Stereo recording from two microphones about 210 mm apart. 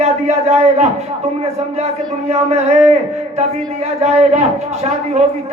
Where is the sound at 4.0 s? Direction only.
30° right (ahead or behind).